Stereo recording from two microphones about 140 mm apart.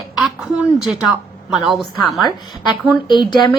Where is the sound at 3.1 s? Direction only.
35° left (ahead or behind).